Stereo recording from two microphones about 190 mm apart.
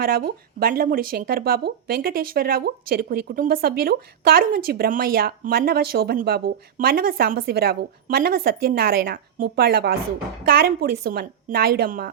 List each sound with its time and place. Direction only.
0.0 s speech: 50° right (ahead or behind)